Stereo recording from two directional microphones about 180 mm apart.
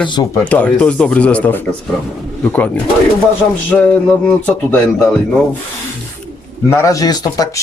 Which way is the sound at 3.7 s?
5° left (ahead or behind).